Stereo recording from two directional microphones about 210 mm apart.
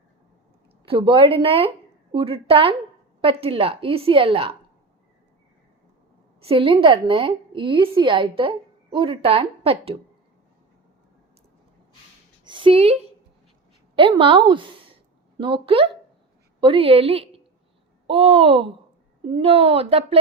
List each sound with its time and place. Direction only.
0.9 s a woman's voice: 25° right (ahead or behind)
6.4 s a woman's voice: 25° right (ahead or behind)
12.5 s a woman's voice: 25° right (ahead or behind)